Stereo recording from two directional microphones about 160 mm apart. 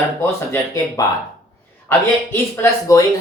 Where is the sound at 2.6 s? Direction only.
20° left (ahead or behind).